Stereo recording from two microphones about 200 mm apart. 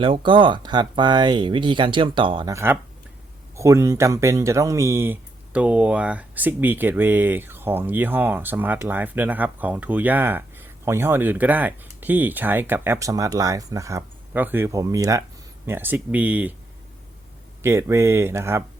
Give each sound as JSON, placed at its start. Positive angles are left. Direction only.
{"t": 0.0, "sound": "speech", "side_deg": -25}
{"t": 17.6, "sound": "speech", "side_deg": -15}